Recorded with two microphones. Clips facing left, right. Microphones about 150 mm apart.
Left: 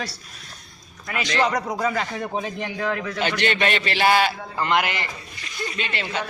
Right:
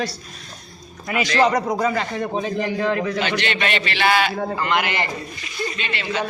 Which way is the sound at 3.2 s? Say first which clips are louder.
Left 1 dB; 45° left (ahead or behind).